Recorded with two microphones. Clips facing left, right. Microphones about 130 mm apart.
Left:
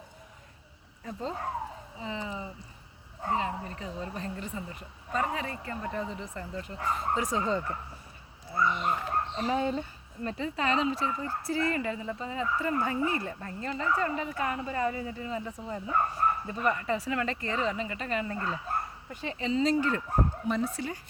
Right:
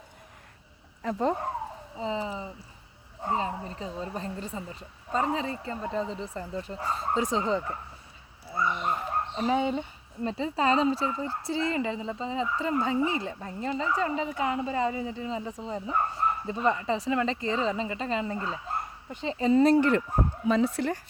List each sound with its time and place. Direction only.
1.0 s speech: 70° right (ahead or behind)
2.0 s speech: 30° right (ahead or behind)
3.3 s speech: 30° right (ahead or behind); by 7.8 s 15° right (ahead or behind)
8.4 s dog: 5° right (ahead or behind)
9.5 s speech: 20° right (ahead or behind)
18.7 s dog: 25° right (ahead or behind)
19.4 s speech: 50° right (ahead or behind)